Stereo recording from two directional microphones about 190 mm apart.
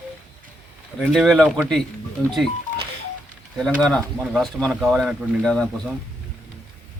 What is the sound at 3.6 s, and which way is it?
Speech, 5° left (ahead or behind).